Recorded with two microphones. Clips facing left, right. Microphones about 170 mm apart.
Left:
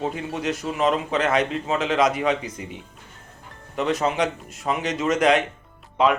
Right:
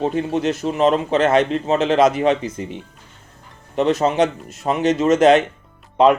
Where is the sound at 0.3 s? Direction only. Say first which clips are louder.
Right 6 dB; 25° right (ahead or behind).